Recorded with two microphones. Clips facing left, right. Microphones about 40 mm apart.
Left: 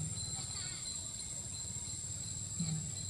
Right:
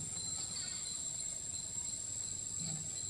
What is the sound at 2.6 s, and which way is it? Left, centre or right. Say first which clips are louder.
Music: left 8 dB; left.